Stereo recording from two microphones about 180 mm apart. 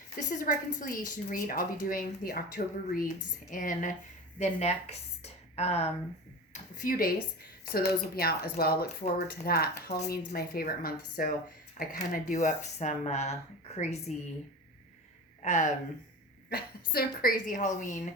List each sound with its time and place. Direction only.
0.2 s a woman's voice: 45° left (ahead or behind)
6.5 s a sound: 55° left (ahead or behind)
7.7 s a woman's voice: 60° left (ahead or behind); by 14.0 s 40° left (ahead or behind)
15.4 s speech: 40° left (ahead or behind)
16.5 s a woman's voice: 60° left (ahead or behind)